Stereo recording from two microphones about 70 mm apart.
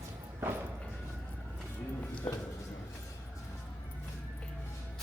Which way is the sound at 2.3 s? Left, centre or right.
Left.